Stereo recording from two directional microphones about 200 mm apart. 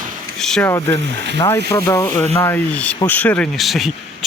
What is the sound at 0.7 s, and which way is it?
Speech, 10° left (ahead or behind).